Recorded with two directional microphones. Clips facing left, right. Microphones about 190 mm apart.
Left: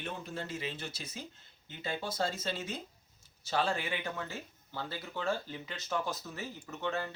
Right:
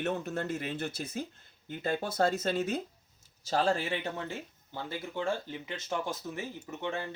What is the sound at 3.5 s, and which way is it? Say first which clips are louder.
Speech: right 4 dB; 40° right (ahead or behind).